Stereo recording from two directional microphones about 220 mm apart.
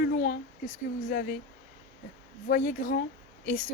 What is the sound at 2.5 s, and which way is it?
Speech, 35° left (ahead or behind).